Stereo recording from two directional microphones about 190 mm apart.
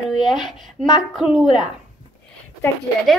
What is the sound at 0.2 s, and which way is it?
Speech, centre (ahead or behind).